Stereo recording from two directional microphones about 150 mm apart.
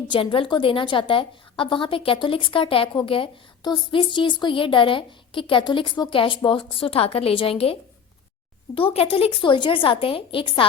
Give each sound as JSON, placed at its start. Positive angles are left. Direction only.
{"t": 0.1, "sound": "a woman's voice", "side_deg": 35}
{"t": 8.7, "sound": "a woman's voice", "side_deg": 40}